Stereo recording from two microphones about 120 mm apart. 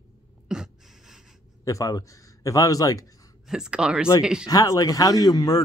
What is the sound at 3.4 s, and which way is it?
Speech, 5° right (ahead or behind).